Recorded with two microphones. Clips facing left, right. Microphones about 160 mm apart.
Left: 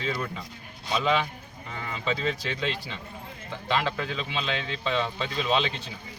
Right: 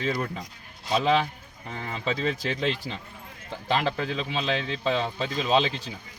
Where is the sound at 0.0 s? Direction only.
45° right (ahead or behind).